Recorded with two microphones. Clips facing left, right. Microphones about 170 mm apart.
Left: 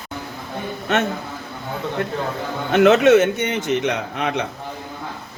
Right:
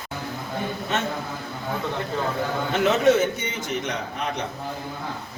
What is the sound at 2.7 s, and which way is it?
A man's voice, 70° left (ahead or behind).